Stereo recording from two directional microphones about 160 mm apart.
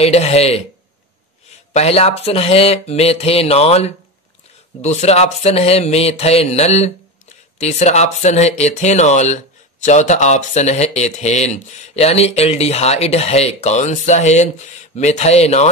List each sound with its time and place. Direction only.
0.0 s speech: 40° left (ahead or behind)
1.8 s speech: 40° left (ahead or behind)